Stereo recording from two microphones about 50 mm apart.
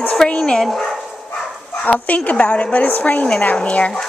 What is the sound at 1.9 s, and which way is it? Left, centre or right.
Speech, left.